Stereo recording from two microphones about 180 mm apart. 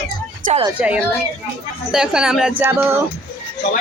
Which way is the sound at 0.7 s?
5° right (ahead or behind).